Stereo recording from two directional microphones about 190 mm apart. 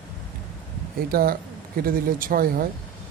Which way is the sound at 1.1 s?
50° right (ahead or behind).